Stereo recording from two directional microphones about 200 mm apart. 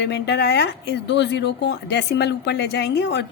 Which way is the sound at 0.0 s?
55° left (ahead or behind).